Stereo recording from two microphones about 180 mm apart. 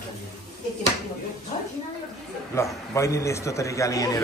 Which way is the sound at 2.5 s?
15° left (ahead or behind).